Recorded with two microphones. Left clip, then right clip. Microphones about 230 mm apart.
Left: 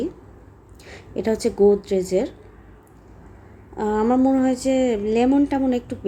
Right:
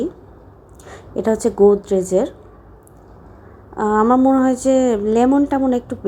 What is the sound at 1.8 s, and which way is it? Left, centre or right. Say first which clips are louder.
Speech: right 4 dB; centre.